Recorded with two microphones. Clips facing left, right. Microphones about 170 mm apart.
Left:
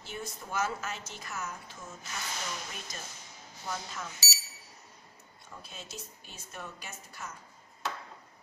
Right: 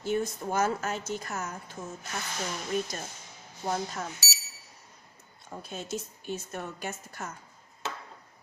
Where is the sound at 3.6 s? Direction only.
50° right (ahead or behind).